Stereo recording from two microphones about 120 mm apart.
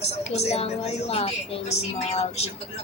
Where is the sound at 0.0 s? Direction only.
65° left (ahead or behind).